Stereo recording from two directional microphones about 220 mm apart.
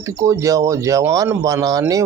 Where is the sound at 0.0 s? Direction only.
15° right (ahead or behind).